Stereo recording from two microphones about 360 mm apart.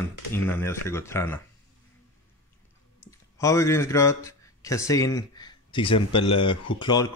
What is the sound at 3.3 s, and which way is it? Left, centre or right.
A man's voice, centre.